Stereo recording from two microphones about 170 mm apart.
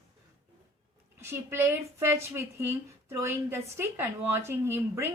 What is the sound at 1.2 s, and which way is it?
A woman's voice, 15° right (ahead or behind).